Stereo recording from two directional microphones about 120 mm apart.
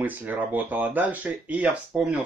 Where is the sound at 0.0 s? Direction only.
15° right (ahead or behind).